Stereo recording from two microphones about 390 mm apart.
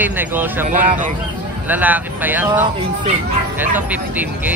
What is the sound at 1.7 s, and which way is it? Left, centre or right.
Speech, centre.